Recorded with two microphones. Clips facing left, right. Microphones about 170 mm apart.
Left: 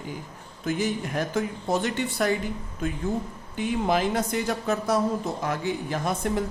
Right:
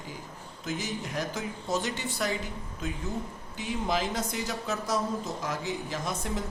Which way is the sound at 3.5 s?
55° left (ahead or behind).